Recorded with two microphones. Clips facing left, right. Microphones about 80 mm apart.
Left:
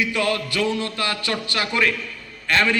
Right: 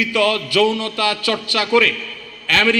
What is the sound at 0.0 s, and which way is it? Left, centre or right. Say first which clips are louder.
A man's voice: right 4 dB; left.